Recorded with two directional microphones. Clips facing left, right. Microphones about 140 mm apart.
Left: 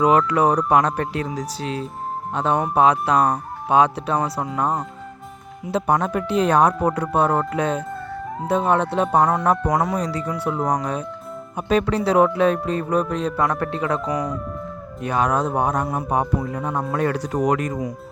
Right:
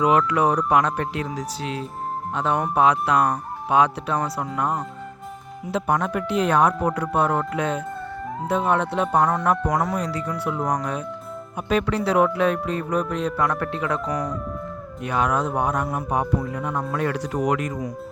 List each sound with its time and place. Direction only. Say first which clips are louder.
0.0 s speech: left 2 dB; 35° left (ahead or behind)
14.1 s speech: left 2 dB; 10° left (ahead or behind)
15.0 s speech: left 2 dB; 35° left (ahead or behind)
16.2 s speech: left 1 dB; 20° left (ahead or behind)
16.6 s speech: left 2 dB; 35° left (ahead or behind)